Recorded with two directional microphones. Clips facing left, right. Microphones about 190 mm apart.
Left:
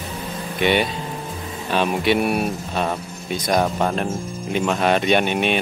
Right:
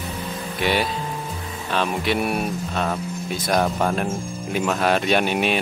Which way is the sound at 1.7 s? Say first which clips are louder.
Left 4 dB; 5° left (ahead or behind).